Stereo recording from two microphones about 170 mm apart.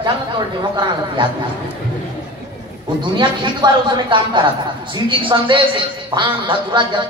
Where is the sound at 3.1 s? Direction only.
25° right (ahead or behind).